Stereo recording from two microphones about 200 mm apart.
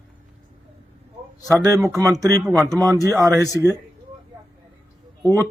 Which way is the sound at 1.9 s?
15° right (ahead or behind).